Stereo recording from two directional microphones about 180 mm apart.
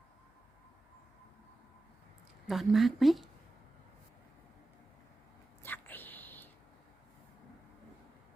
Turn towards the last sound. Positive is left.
turn(degrees=10)  # may be behind; listen again after turning